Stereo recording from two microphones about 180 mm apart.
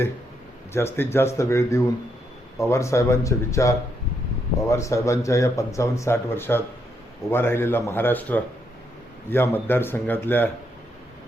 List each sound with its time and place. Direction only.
0.7 s speech: 15° left (ahead or behind)